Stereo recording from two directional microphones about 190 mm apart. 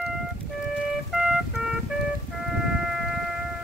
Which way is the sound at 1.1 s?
Centre (ahead or behind).